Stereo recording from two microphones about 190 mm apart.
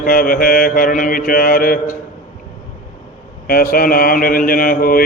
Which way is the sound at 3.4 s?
50° left (ahead or behind).